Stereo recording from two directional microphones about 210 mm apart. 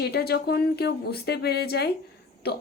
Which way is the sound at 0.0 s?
50° left (ahead or behind).